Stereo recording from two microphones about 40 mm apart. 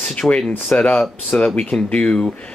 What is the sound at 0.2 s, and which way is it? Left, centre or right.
Speech, centre.